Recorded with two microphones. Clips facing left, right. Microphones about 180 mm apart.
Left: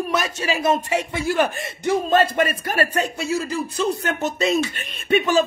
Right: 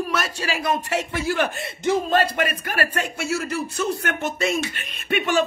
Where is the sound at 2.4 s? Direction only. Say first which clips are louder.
Left 3 dB; 25° left (ahead or behind).